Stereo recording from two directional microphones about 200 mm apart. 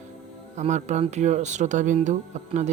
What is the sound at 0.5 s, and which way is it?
Speech, 35° right (ahead or behind).